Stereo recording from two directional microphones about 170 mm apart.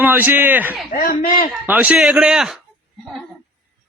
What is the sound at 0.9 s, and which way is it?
Speech, 55° left (ahead or behind).